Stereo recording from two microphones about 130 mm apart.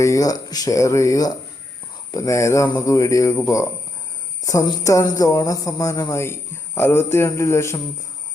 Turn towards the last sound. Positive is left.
turn(degrees=20)  # may be behind; listen again after turning